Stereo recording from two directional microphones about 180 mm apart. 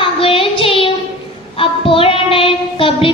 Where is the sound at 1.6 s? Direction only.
30° left (ahead or behind).